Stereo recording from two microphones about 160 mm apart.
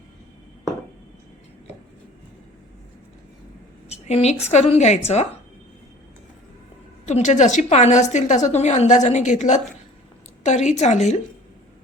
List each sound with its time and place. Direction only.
3.8 s a woman's voice: 40° left (ahead or behind)
7.0 s a woman's voice: 45° left (ahead or behind)